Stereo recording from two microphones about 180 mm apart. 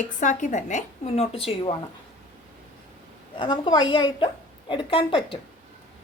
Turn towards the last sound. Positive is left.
turn(degrees=30)  # may be behind; listen again after turning